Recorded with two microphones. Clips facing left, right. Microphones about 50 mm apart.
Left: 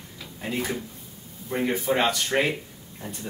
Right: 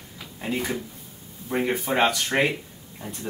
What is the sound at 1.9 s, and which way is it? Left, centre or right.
Speech, right.